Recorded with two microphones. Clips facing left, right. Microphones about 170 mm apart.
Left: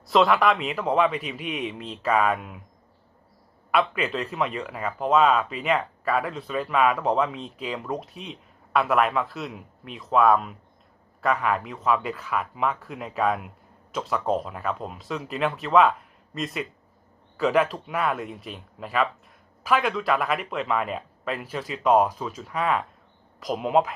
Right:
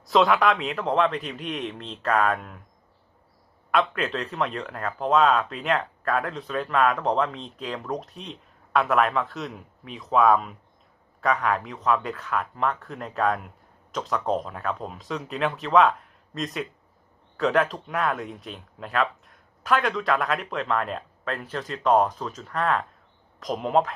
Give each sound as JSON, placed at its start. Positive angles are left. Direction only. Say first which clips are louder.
{"t": 0.1, "sound": "speech", "louder": "even", "side_deg": 0}
{"t": 3.7, "sound": "speech", "louder": "even", "side_deg": 5}